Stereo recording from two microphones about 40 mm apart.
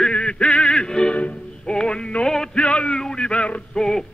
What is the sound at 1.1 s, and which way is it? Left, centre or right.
Music, left.